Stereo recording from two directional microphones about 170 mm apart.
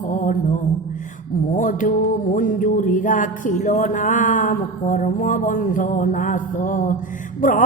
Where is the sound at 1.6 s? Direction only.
50° left (ahead or behind).